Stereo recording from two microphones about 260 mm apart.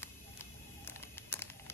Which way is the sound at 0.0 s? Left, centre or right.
Centre.